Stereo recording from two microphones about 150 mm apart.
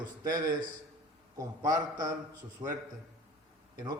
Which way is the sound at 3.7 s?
25° right (ahead or behind).